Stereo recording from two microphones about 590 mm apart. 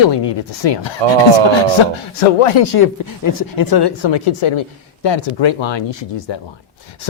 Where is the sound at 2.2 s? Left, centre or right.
Left.